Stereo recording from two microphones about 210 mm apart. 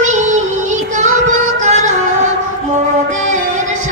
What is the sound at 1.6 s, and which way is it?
Yodeling, 35° right (ahead or behind).